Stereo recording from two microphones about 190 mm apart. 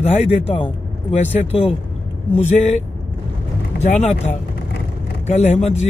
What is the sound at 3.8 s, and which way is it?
Speech, 35° left (ahead or behind).